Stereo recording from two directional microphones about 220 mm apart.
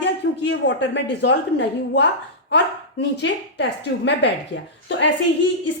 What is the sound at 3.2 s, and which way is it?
A woman's voice, 50° left (ahead or behind).